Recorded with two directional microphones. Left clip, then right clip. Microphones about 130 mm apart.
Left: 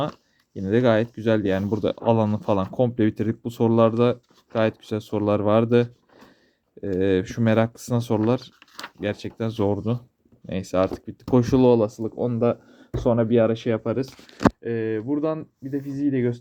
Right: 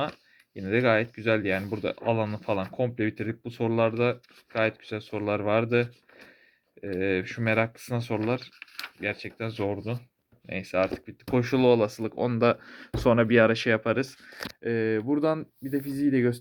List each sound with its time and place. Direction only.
0.0 s a sound: 50° left (ahead or behind)
0.7 s speech: 50° left (ahead or behind)
2.0 s speech: 85° left
4.6 s speech: 90° left; by 5.6 s 65° left (ahead or behind)
7.0 s speech: 70° left (ahead or behind)
11.0 s speech: 60° left (ahead or behind)
11.6 s speech: 35° left (ahead or behind)
12.0 s speech: 5° left (ahead or behind)
12.8 s a sound: 60° right (ahead or behind)
13.1 s speech: 5° right (ahead or behind)
14.6 s speech: 25° right (ahead or behind)